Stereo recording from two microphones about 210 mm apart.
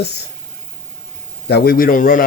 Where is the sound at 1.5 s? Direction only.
50° left (ahead or behind).